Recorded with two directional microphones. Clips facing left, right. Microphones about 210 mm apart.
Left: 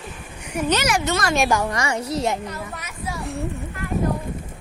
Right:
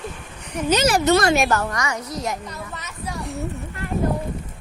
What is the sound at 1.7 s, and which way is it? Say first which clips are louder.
Speech: left 3 dB; 30° left (ahead or behind).